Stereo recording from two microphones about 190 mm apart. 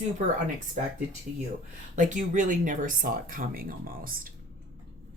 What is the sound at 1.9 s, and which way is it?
Speech, 40° right (ahead or behind).